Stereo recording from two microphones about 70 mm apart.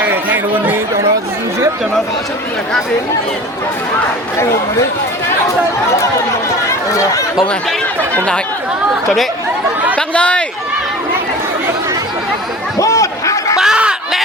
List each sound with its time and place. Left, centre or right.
0.1 s chatter: right
6.7 s speech: left
8.1 s speech: centre
10.2 s run: centre
12.8 s a sound: left
13.6 s a sound: centre